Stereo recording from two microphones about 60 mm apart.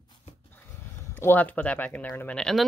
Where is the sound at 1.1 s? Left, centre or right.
Left.